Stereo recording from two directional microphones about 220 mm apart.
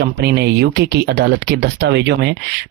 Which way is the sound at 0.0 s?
50° right (ahead or behind).